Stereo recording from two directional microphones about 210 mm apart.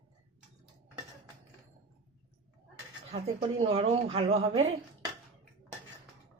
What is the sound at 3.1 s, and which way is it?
A woman's voice, 30° right (ahead or behind).